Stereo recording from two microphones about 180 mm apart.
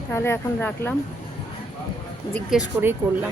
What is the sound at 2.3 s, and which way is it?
Speech, centre (ahead or behind).